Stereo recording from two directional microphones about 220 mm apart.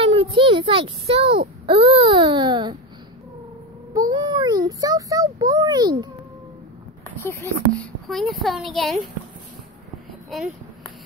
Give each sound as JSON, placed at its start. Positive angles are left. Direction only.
{"t": 0.0, "sound": "a sound", "side_deg": -25}
{"t": 1.7, "sound": "speech", "side_deg": -25}
{"t": 3.9, "sound": "a child's voice", "side_deg": -20}
{"t": 7.2, "sound": "speech", "side_deg": 10}